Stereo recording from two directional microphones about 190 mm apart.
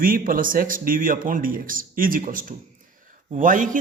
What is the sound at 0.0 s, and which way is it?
Speech, 50° right (ahead or behind).